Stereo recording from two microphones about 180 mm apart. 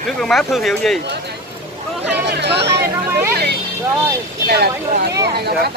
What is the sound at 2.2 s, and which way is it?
Speech, 70° right (ahead or behind).